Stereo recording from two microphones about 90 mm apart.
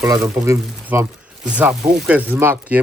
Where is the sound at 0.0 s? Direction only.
35° right (ahead or behind).